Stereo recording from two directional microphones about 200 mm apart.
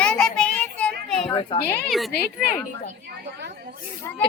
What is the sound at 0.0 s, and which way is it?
Child singing, 5° left (ahead or behind).